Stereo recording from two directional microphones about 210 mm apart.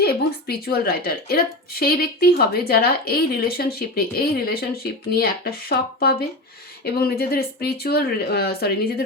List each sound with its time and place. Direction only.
0.0 s speech: 45° left (ahead or behind)